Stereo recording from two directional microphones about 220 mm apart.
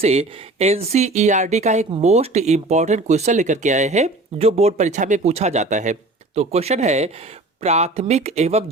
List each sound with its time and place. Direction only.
0.0 s speech: 30° right (ahead or behind)